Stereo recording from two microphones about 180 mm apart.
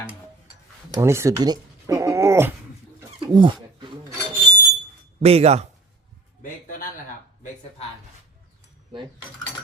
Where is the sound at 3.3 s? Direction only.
25° right (ahead or behind).